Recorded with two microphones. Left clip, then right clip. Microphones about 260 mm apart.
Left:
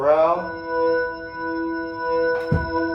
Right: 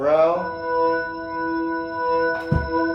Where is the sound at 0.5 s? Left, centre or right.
Right.